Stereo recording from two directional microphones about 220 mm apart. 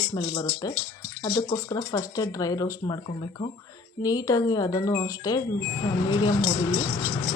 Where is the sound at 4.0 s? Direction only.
15° left (ahead or behind).